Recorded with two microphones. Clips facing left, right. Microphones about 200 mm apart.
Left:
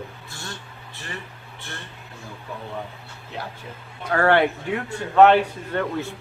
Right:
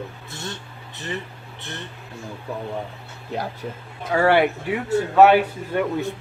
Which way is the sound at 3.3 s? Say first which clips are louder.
Right 6 dB; 45° right (ahead or behind).